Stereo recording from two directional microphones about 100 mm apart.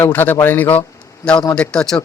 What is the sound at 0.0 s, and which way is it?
A man's voice, 20° left (ahead or behind).